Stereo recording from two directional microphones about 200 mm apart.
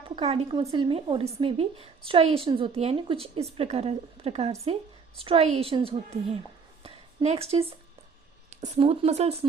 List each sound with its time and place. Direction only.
0.2 s a woman's voice: 30° right (ahead or behind)